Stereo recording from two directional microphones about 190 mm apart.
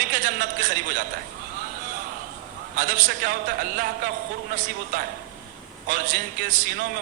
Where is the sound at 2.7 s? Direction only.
45° right (ahead or behind).